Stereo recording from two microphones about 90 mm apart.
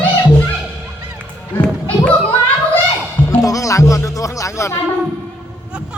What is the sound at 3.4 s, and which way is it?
Speech, 40° left (ahead or behind).